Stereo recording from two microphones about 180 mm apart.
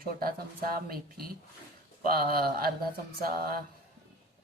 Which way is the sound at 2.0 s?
55° right (ahead or behind).